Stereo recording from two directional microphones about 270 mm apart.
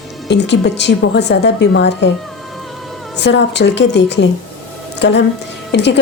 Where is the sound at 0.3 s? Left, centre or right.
Left.